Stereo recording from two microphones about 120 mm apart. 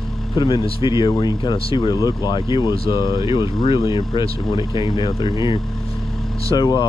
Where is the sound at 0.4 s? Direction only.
40° left (ahead or behind).